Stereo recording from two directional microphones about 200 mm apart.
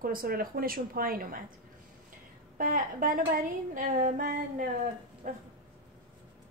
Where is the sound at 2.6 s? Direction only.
45° right (ahead or behind).